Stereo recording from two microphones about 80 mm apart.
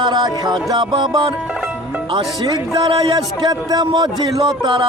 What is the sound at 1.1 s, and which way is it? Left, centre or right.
Music, right.